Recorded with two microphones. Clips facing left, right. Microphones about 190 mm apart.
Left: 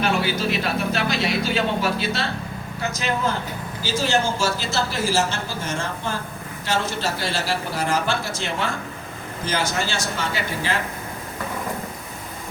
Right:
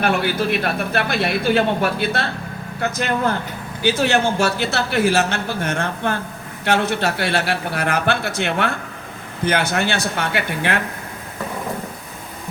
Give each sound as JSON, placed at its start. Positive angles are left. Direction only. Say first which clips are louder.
{"t": 0.0, "sound": "a man's voice", "louder": "right 3 dB", "side_deg": -60}